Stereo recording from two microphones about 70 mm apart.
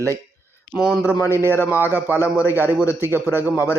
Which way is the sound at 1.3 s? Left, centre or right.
Right.